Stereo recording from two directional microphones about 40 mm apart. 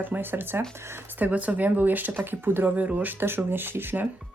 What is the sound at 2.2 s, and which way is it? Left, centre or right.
Speech, right.